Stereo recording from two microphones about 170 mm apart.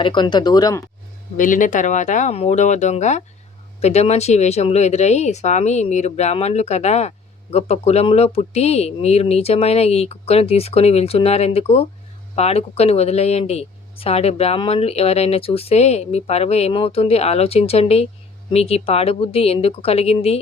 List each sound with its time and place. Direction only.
0.0 s speech: 25° left (ahead or behind)
1.4 s speech: 50° left (ahead or behind)